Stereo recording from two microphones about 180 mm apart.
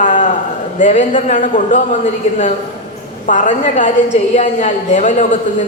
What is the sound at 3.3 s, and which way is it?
A man's voice, 45° left (ahead or behind).